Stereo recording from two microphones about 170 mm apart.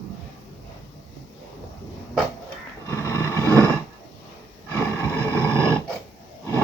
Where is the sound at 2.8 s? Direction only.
15° left (ahead or behind).